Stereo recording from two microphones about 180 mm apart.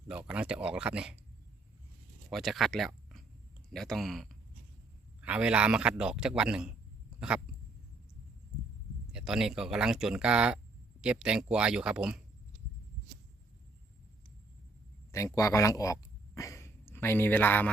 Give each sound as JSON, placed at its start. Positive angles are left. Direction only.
{"t": 0.1, "sound": "a man's voice", "side_deg": -5}
{"t": 2.3, "sound": "a man's voice", "side_deg": 0}
{"t": 7.2, "sound": "dog", "side_deg": -5}
{"t": 9.1, "sound": "a man's voice", "side_deg": -5}
{"t": 15.1, "sound": "speech", "side_deg": 15}